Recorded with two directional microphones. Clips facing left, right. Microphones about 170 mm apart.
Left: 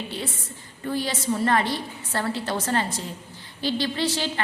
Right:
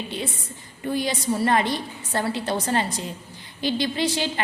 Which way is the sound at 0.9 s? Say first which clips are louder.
Right 2 dB; 15° right (ahead or behind).